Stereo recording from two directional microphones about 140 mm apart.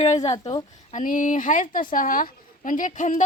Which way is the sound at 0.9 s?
70° left (ahead or behind).